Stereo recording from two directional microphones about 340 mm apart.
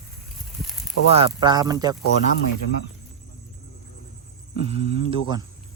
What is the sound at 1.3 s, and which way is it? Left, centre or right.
Speech, centre.